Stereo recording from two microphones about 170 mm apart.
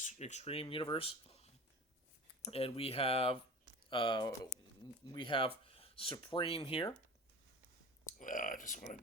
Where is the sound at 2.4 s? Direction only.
35° left (ahead or behind).